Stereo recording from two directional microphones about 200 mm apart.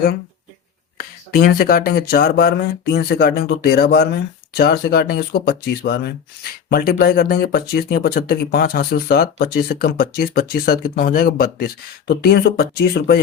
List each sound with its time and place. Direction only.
0.9 s speech: 45° left (ahead or behind)